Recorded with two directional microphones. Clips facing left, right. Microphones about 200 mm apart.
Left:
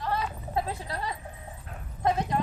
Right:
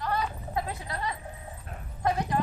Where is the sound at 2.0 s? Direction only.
25° left (ahead or behind).